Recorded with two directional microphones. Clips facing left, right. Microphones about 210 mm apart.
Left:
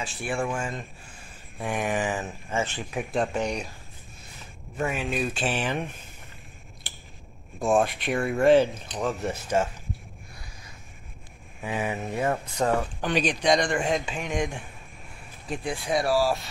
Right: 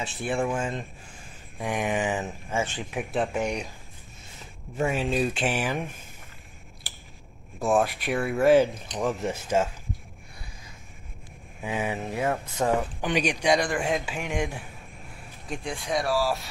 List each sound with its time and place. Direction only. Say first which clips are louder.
0.0 s speech: right 2 dB; 20° right (ahead or behind)
4.7 s speech: right 3 dB; 30° right (ahead or behind)
5.4 s speech: right 1 dB; 10° right (ahead or behind)
7.6 s speech: left 1 dB; 5° right (ahead or behind)
11.6 s speech: even; 10° right (ahead or behind)
12.5 s speech: even; 15° right (ahead or behind)
15.4 s speech: left 2 dB; 5° left (ahead or behind)